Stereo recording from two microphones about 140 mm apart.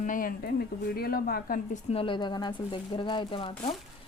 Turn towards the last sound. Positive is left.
turn(degrees=40)  # may be behind; listen again after turning